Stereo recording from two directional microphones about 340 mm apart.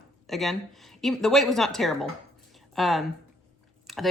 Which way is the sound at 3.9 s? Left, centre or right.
Centre.